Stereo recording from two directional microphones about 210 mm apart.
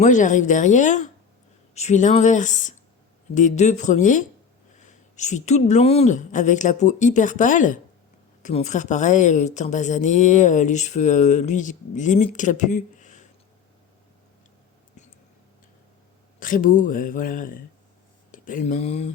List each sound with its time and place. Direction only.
0.0 s speech: 35° left (ahead or behind)
16.4 s speech: 40° left (ahead or behind)